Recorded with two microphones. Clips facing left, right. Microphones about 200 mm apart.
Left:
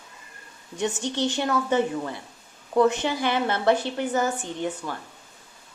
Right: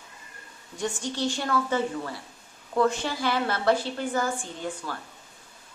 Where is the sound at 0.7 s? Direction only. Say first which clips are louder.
Left 4 dB; 20° left (ahead or behind).